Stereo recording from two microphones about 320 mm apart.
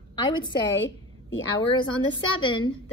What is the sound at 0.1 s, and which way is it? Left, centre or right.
Speech, centre.